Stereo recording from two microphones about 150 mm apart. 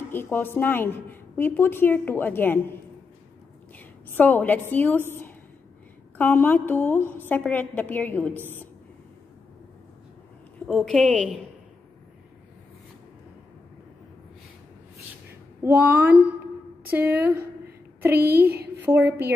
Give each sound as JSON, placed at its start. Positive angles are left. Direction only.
{"t": 0.1, "sound": "a woman's voice", "side_deg": 15}
{"t": 3.7, "sound": "a woman's voice", "side_deg": 10}
{"t": 6.1, "sound": "a woman's voice", "side_deg": 15}
{"t": 10.7, "sound": "a woman's voice", "side_deg": 0}
{"t": 15.6, "sound": "speech", "side_deg": -10}
{"t": 18.1, "sound": "a woman's voice", "side_deg": -90}
{"t": 18.8, "sound": "speech", "side_deg": -15}